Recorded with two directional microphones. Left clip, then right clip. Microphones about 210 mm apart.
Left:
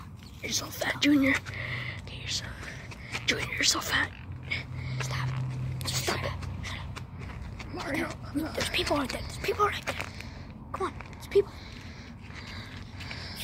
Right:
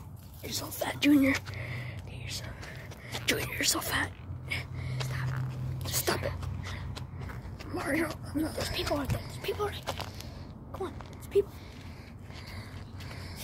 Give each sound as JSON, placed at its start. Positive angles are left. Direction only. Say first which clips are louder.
{"t": 0.4, "sound": "speech", "louder": "left 3 dB", "side_deg": -5}
{"t": 1.6, "sound": "whispering", "louder": "left 6 dB", "side_deg": 0}
{"t": 3.3, "sound": "speech", "louder": "left 3 dB", "side_deg": -15}
{"t": 5.0, "sound": "whispering", "louder": "left 5 dB", "side_deg": 20}
{"t": 5.9, "sound": "a sound", "louder": "even", "side_deg": -15}
{"t": 6.2, "sound": "a sound", "louder": "left 1 dB", "side_deg": 30}
{"t": 7.8, "sound": "speech", "louder": "right 1 dB", "side_deg": -20}
{"t": 8.8, "sound": "speech", "louder": "left 3 dB", "side_deg": 25}
{"t": 10.7, "sound": "a sound", "louder": "left 5 dB", "side_deg": 15}